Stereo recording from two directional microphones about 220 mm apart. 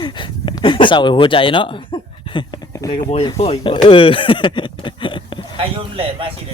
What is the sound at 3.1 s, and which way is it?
Speech, 25° left (ahead or behind).